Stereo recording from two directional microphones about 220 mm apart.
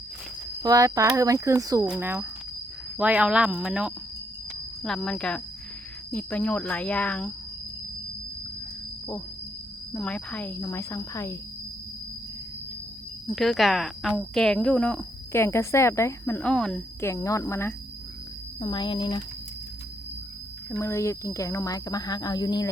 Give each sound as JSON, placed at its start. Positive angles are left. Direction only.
{"t": 0.6, "sound": "speech", "side_deg": -15}
{"t": 9.9, "sound": "speech", "side_deg": 5}
{"t": 13.2, "sound": "speech", "side_deg": 0}
{"t": 20.7, "sound": "speech", "side_deg": 15}